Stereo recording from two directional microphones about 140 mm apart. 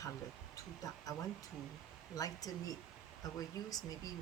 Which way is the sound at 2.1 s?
25° left (ahead or behind).